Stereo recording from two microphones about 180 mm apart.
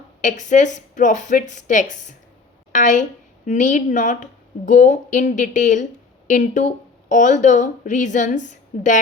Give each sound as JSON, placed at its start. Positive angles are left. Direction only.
{"t": 0.2, "sound": "speech", "side_deg": 45}